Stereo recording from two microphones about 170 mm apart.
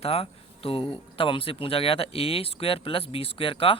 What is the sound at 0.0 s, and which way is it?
Speech, 35° left (ahead or behind).